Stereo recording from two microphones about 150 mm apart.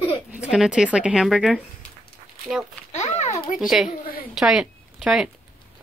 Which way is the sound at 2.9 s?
50° left (ahead or behind).